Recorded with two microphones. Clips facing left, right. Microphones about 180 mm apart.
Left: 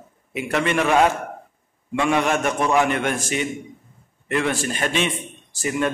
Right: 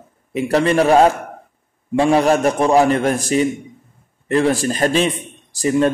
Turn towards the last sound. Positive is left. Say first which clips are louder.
# right 7 dB
turn(degrees=-35)  # may be behind; listen again after turning